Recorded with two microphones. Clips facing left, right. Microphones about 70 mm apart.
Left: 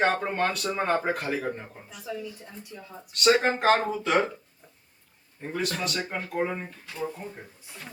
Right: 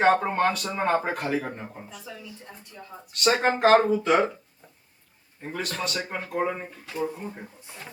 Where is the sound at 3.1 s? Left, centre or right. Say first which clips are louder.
Left 1 dB; centre.